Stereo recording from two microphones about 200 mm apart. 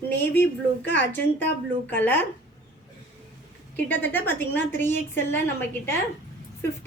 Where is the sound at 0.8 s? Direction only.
65° left (ahead or behind).